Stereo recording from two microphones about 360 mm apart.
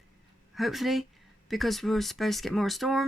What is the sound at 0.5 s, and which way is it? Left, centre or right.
Speech, centre.